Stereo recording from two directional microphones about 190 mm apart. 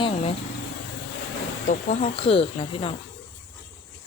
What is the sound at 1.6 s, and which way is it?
Speech, 40° left (ahead or behind).